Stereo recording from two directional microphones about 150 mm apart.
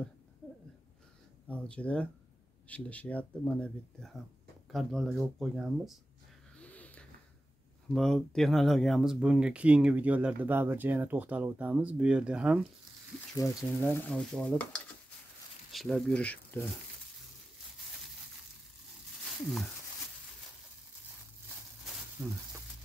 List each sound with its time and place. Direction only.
1.5 s speech: 10° left (ahead or behind)
6.6 s a sound: 10° left (ahead or behind)
7.9 s speech: 5° left (ahead or behind)
13.4 s speech: 25° left (ahead or behind)
13.9 s speech: 5° left (ahead or behind)
22.2 s speech: 20° right (ahead or behind)